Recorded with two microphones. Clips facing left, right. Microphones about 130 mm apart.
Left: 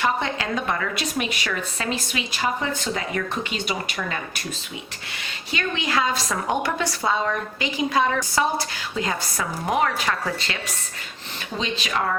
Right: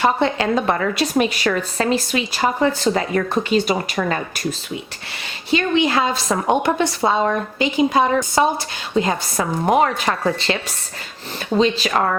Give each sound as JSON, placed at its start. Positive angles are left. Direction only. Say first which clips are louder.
{"t": 0.0, "sound": "a woman's voice", "louder": "right 6 dB", "side_deg": -35}
{"t": 5.5, "sound": "a woman's voice", "louder": "right 9 dB", "side_deg": -25}
{"t": 9.8, "sound": "a woman's voice", "louder": "right 5 dB", "side_deg": -40}